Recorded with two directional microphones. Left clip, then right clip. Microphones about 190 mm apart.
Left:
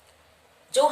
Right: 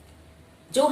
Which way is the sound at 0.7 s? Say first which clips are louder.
Left 1 dB; 20° left (ahead or behind).